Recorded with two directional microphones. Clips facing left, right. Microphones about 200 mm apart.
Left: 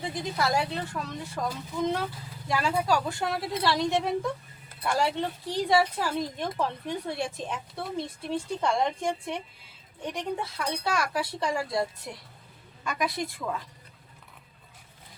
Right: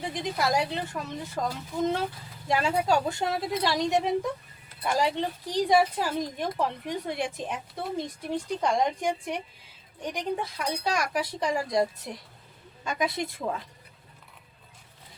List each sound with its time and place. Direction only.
0.1 s speech: 20° right (ahead or behind)
2.5 s a woman's voice: 20° right (ahead or behind)